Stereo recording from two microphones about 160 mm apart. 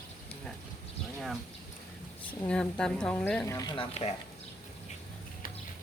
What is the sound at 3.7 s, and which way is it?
Speech, 35° left (ahead or behind).